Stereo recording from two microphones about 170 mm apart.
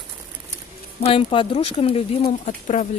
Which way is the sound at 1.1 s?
35° left (ahead or behind).